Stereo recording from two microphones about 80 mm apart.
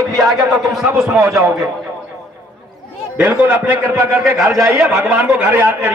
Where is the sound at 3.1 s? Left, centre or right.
Centre.